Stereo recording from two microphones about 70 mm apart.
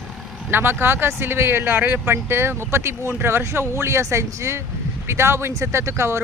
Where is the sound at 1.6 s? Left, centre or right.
Right.